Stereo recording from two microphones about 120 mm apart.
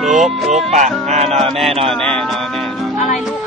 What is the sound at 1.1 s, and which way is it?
Music, 60° right (ahead or behind).